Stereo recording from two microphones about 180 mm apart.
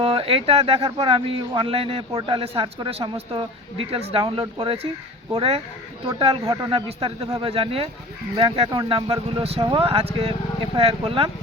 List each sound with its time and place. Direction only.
0.0 s a man's voice: 30° right (ahead or behind)